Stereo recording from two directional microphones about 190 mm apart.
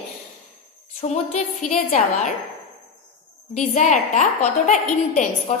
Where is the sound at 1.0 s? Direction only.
35° left (ahead or behind).